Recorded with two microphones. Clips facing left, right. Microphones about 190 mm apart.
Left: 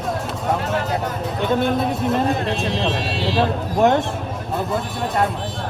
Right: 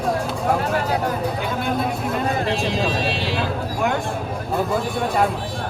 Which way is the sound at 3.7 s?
35° left (ahead or behind).